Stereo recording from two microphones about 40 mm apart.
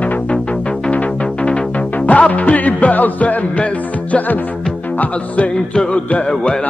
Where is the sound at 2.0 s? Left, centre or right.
Left.